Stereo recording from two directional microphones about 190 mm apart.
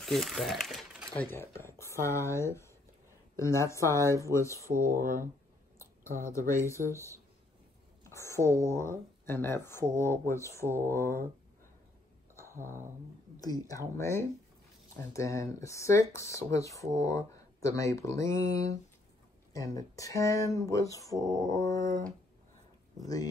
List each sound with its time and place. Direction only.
0.0 s speech: centre (ahead or behind)
4.6 s speech: 45° right (ahead or behind)
6.2 s speech: 15° left (ahead or behind)
8.1 s a sound: 15° left (ahead or behind)
8.6 s speech: 15° left (ahead or behind)
12.5 s speech: 45° right (ahead or behind)
13.4 s speech: 20° left (ahead or behind)